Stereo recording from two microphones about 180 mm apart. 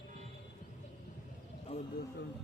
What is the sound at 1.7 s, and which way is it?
Speech, 35° left (ahead or behind).